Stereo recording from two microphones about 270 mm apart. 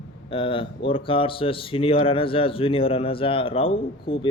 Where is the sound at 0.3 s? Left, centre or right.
Centre.